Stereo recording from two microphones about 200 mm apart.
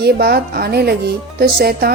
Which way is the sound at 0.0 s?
50° right (ahead or behind).